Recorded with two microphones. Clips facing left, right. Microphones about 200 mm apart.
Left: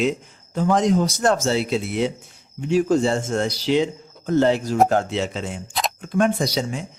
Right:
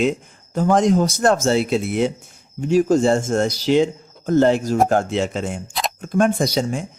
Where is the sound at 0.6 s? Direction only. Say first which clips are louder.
Right 2 dB; 50° right (ahead or behind).